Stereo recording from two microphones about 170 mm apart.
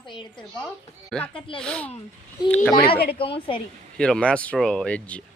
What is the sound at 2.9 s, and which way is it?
Speech, 70° left (ahead or behind).